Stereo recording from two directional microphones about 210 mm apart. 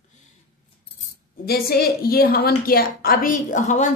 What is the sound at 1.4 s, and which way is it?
A woman's voice, 45° left (ahead or behind).